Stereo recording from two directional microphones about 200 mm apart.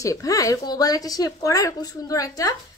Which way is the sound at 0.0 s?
15° left (ahead or behind).